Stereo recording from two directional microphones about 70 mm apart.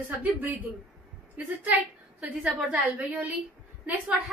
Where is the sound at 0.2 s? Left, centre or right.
Right.